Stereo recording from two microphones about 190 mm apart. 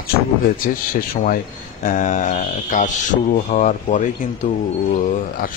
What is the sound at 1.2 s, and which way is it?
Speech, 45° left (ahead or behind).